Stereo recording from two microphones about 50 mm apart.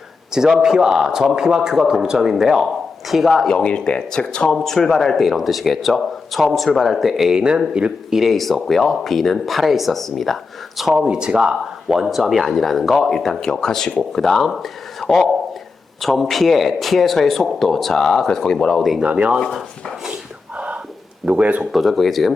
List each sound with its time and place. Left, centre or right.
0.3 s a man's voice: centre
3.5 s speech: centre
4.5 s speech: centre
7.3 s a man's voice: centre
8.1 s speech: centre
10.9 s speech: centre
15.0 s a man's voice: centre
16.0 s speech: centre
19.0 s speech: right
21.2 s speech: right
21.7 s speech: centre